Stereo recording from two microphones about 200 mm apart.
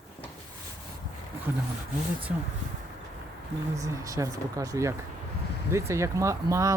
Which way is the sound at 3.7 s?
15° right (ahead or behind).